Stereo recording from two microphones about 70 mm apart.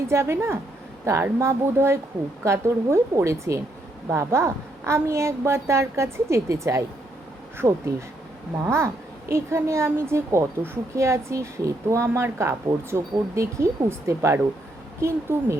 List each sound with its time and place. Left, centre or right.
0.1 s a woman's voice: right